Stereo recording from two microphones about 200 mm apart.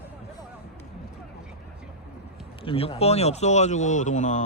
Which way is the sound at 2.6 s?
30° left (ahead or behind).